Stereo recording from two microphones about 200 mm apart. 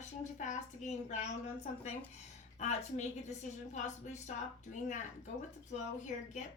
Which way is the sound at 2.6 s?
35° left (ahead or behind).